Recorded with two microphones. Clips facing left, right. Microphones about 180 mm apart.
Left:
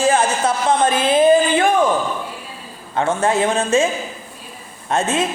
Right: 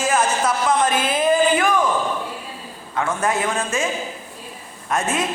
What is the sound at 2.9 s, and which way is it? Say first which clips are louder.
Speech: left 4 dB; 30° left (ahead or behind).